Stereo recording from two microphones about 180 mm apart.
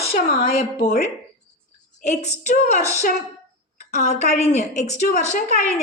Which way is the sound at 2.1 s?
40° left (ahead or behind).